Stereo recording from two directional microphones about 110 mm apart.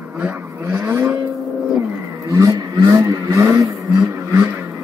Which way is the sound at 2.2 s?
30° right (ahead or behind).